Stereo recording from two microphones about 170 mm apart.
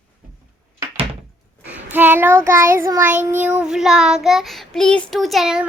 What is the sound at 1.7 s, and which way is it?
Child singing, 10° right (ahead or behind).